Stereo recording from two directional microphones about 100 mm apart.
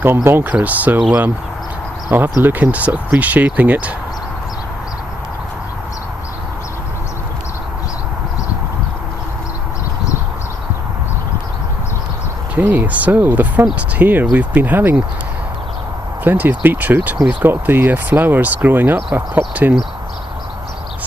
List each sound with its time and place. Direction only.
0.3 s speech: 25° right (ahead or behind)
2.0 s speech: 20° right (ahead or behind)
12.5 s speech: 15° right (ahead or behind)
16.2 s speech: 20° right (ahead or behind)